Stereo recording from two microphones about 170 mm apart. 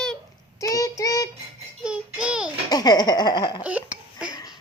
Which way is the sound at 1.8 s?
5° right (ahead or behind).